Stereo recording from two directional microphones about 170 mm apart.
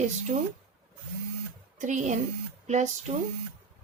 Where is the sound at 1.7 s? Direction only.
45° right (ahead or behind).